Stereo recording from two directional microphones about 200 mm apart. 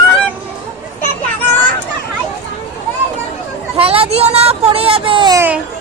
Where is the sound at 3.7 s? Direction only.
30° right (ahead or behind).